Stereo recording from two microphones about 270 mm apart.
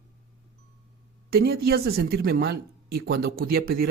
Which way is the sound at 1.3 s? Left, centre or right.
Right.